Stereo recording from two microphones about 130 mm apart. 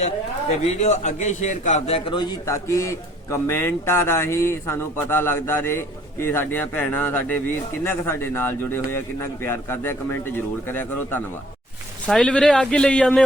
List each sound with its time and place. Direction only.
0.6 s a man's voice: 60° left (ahead or behind)
1.9 s a man's voice: 40° left (ahead or behind)
2.5 s a man's voice: 25° left (ahead or behind)
12.0 s a man's voice: 5° left (ahead or behind)